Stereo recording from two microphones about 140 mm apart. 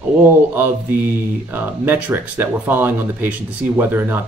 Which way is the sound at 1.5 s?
15° right (ahead or behind).